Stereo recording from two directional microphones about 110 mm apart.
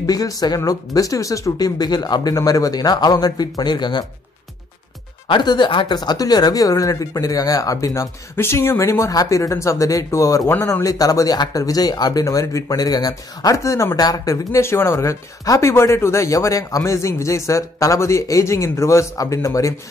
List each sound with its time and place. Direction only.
0.0 s speech: 35° left (ahead or behind)
5.3 s speech: 40° left (ahead or behind)